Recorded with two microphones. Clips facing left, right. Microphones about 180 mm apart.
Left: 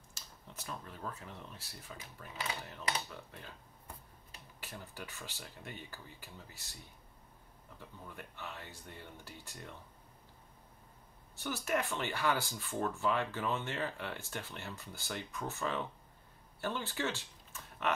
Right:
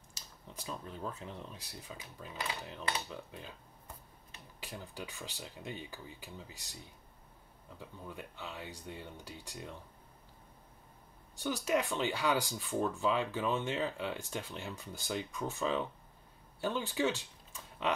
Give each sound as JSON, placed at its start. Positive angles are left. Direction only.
{"t": 0.6, "sound": "speech", "side_deg": -20}
{"t": 4.6, "sound": "speech", "side_deg": -15}
{"t": 8.1, "sound": "speech", "side_deg": -15}
{"t": 11.3, "sound": "speech", "side_deg": -15}